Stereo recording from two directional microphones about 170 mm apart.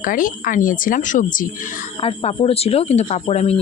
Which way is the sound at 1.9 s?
35° left (ahead or behind).